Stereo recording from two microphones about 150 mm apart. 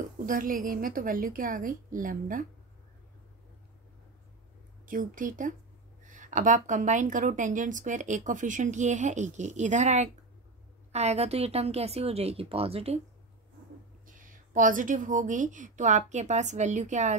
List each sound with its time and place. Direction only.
0.3 s a woman's voice: 65° right (ahead or behind)
4.8 s a woman's voice: 65° right (ahead or behind); by 13.0 s 40° right (ahead or behind)
14.0 s a woman's voice: 65° right (ahead or behind)